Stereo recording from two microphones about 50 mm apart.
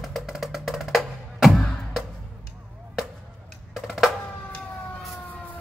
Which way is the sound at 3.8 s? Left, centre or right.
Centre.